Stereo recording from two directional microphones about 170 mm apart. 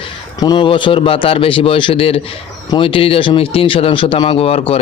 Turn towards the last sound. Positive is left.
turn(degrees=35)  # may be behind; listen again after turning